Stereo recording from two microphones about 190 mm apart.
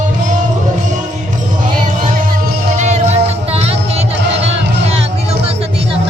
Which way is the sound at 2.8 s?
35° right (ahead or behind).